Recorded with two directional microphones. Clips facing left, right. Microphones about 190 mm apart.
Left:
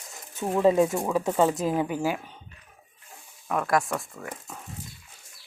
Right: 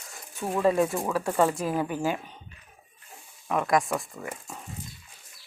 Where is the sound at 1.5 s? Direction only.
20° left (ahead or behind).